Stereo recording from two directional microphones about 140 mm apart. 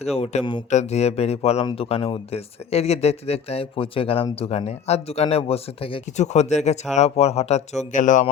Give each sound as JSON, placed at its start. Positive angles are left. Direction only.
{"t": 0.0, "sound": "speech", "side_deg": 50}